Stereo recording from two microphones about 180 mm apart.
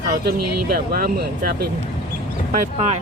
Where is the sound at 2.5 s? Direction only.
40° right (ahead or behind).